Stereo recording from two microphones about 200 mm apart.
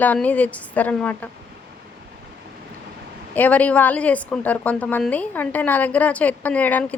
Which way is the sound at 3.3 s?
10° left (ahead or behind).